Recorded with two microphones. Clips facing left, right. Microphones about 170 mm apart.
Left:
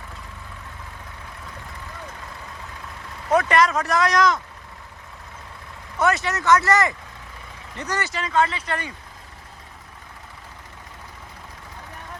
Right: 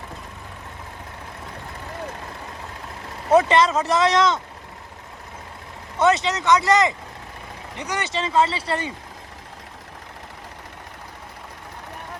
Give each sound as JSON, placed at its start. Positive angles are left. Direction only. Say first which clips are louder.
{"t": 3.2, "sound": "speech", "louder": "right 2 dB", "side_deg": -25}
{"t": 6.0, "sound": "speech", "louder": "right 3 dB", "side_deg": -20}